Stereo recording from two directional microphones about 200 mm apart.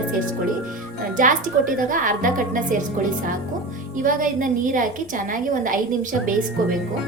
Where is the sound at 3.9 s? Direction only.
40° right (ahead or behind).